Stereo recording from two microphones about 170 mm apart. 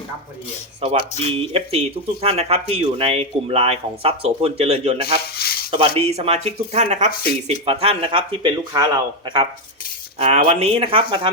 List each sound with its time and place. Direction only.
0.8 s speech: 35° right (ahead or behind)
5.0 s speech: 65° left (ahead or behind)
5.7 s speech: 35° right (ahead or behind)
10.2 s speech: 40° right (ahead or behind)